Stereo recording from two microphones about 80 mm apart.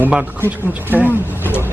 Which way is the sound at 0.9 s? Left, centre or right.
Right.